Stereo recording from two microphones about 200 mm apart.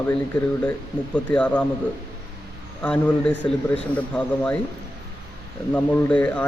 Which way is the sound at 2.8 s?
5° left (ahead or behind).